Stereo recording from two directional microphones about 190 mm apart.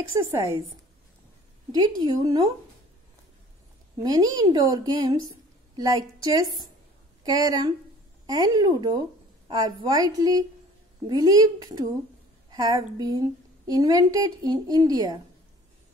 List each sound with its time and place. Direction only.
0.1 s speech: 20° right (ahead or behind)
2.0 s a woman's voice: 20° right (ahead or behind)
4.0 s a woman's voice: 20° right (ahead or behind)